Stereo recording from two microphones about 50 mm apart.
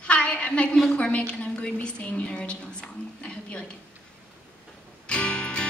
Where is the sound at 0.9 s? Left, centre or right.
Left.